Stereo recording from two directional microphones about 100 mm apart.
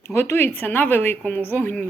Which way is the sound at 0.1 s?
25° left (ahead or behind).